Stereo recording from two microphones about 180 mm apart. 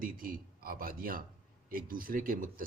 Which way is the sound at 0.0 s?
50° right (ahead or behind).